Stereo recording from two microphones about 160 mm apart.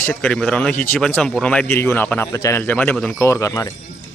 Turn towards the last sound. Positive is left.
turn(degrees=20)  # may be behind; listen again after turning